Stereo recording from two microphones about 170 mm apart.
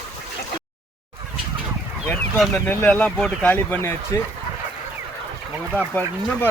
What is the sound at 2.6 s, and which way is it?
Speech, 10° left (ahead or behind).